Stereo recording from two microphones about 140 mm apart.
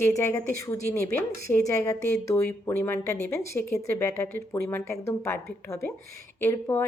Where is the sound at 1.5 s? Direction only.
20° left (ahead or behind).